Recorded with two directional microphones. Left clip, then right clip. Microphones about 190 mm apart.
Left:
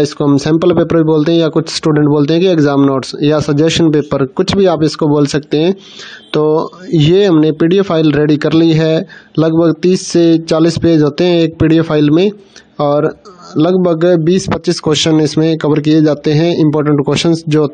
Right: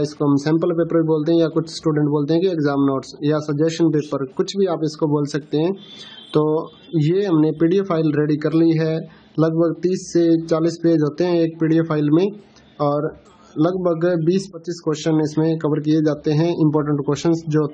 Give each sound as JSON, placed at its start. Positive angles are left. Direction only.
{"t": 0.4, "sound": "speech", "side_deg": 45}